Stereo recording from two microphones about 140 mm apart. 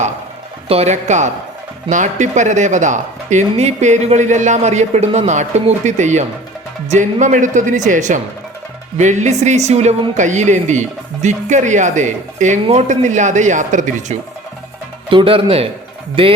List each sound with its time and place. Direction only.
0.7 s speech: 50° right (ahead or behind)
15.1 s speech: 40° right (ahead or behind)